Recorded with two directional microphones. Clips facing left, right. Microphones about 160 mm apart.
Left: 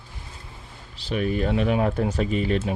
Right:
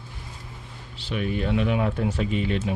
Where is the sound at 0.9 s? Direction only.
40° left (ahead or behind).